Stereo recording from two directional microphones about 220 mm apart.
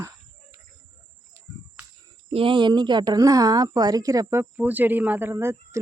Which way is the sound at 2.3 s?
25° right (ahead or behind).